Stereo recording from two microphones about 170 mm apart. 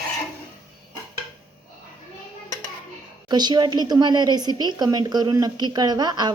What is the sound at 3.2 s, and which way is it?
A woman's voice, 25° right (ahead or behind).